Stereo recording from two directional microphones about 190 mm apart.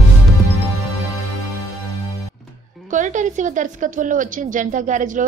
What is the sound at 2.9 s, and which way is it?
A woman's voice, 40° right (ahead or behind).